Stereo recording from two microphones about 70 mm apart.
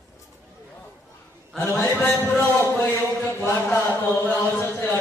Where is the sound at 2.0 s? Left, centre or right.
Left.